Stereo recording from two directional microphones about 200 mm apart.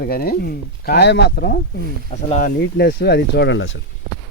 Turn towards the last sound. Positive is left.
turn(degrees=70)  # may be behind; listen again after turning